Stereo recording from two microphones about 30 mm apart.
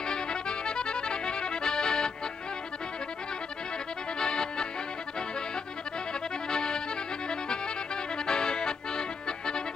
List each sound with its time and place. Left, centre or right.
0.0 s accordion: left
4.2 s music: left
6.5 s accordion: left